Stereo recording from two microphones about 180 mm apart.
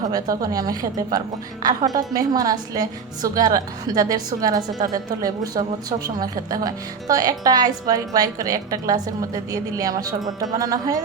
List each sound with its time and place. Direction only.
0.1 s speech: 20° right (ahead or behind)